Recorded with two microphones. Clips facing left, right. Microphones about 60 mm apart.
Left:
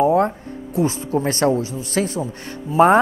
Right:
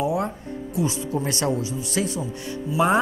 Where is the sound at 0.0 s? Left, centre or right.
Left.